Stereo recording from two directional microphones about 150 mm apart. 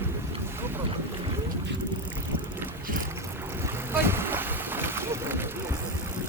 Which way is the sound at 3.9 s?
15° right (ahead or behind).